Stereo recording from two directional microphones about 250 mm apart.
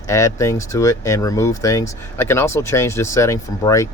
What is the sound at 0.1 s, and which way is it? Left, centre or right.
Speech, centre.